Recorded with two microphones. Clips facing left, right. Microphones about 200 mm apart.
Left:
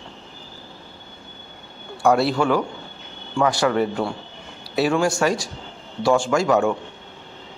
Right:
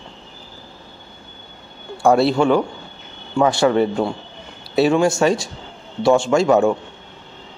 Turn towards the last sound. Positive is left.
turn(degrees=-25)  # may be behind; listen again after turning